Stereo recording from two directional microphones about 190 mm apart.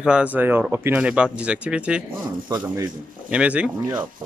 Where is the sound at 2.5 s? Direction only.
20° right (ahead or behind).